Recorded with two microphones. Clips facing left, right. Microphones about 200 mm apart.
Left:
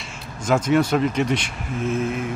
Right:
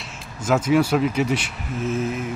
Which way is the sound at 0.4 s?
5° right (ahead or behind).